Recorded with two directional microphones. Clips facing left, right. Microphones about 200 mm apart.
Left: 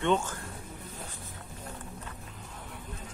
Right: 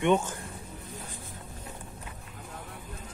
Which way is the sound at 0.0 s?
15° right (ahead or behind).